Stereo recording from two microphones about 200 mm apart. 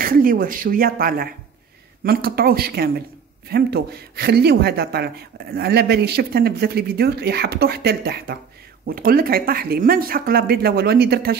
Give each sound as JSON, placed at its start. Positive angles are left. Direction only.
{"t": 0.0, "sound": "speech", "side_deg": -45}